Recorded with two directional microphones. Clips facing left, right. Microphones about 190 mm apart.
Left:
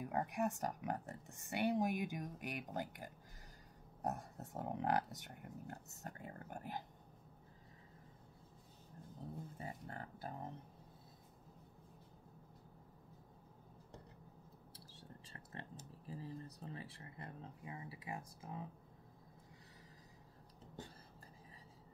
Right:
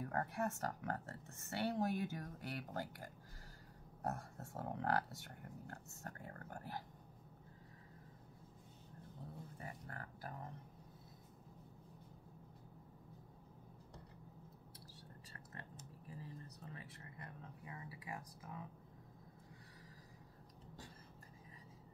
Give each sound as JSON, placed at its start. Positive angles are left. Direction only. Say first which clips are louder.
{"t": 0.0, "sound": "speech", "louder": "left 2 dB", "side_deg": 15}
{"t": 9.6, "sound": "speech", "louder": "left 3 dB", "side_deg": 25}
{"t": 16.1, "sound": "speech", "louder": "left 5 dB", "side_deg": 30}